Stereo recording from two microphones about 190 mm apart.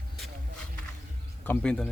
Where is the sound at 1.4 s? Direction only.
10° left (ahead or behind).